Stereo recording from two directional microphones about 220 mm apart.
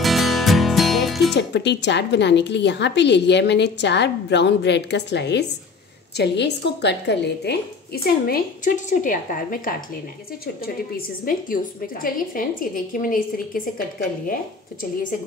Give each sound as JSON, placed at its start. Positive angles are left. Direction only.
{"t": 0.0, "sound": "music", "side_deg": 0}
{"t": 1.3, "sound": "a woman's voice", "side_deg": 50}